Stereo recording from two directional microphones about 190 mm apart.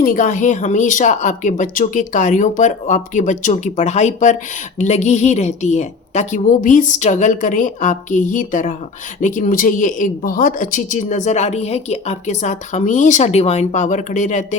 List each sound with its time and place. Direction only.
0.0 s speech: 45° left (ahead or behind)